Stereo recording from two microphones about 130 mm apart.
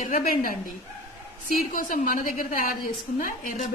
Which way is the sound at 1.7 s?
90° left.